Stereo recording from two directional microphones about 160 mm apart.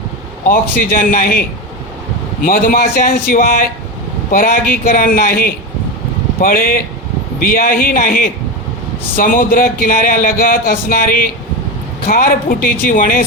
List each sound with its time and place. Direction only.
0.4 s speech: 60° left (ahead or behind)